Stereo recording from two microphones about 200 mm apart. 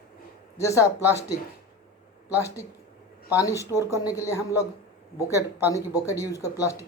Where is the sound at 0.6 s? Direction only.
15° left (ahead or behind).